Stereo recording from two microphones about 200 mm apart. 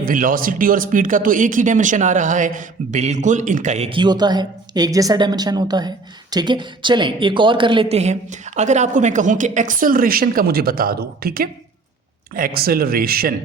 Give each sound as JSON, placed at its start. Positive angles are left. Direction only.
{"t": 0.0, "sound": "speech", "side_deg": -45}